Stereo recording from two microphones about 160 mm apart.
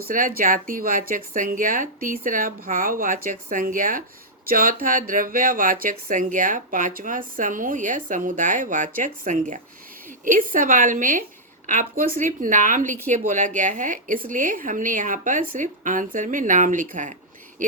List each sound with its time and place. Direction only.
0.0 s a woman's voice: 60° right (ahead or behind)